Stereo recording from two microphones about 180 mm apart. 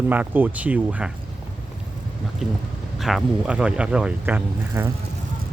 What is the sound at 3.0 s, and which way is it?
Speech, centre (ahead or behind).